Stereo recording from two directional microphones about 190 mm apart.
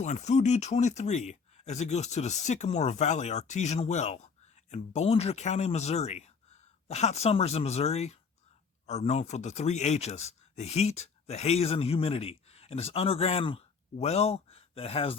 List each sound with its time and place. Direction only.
0.0 s speech: 35° left (ahead or behind)